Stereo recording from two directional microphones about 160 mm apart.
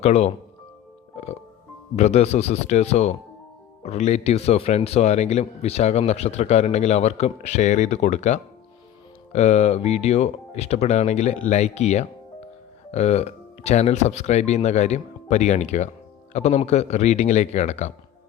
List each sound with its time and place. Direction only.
0.0 s speech: 45° left (ahead or behind)
1.1 s music: 40° left (ahead or behind)
2.0 s speech: 45° left (ahead or behind)